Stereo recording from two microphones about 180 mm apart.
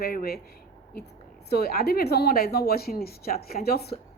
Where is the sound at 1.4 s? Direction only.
60° left (ahead or behind).